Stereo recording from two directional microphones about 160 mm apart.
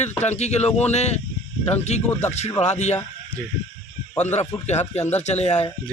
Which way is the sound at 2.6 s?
45° left (ahead or behind).